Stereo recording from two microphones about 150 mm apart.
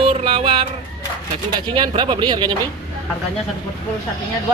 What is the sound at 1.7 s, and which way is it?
Speech, 35° right (ahead or behind).